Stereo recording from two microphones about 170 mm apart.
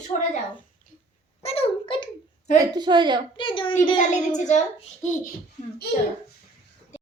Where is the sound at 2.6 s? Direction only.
25° right (ahead or behind).